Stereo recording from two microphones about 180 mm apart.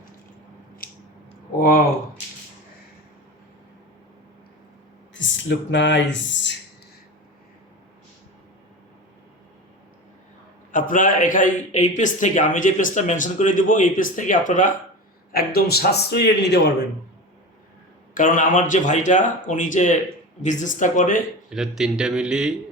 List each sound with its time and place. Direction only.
1.5 s a man's voice: 55° left (ahead or behind)
5.1 s speech: 90° left
10.7 s a man's voice: 50° left (ahead or behind)
15.3 s a man's voice: 60° left (ahead or behind)
18.1 s a man's voice: 50° left (ahead or behind)
21.5 s speech: 5° right (ahead or behind)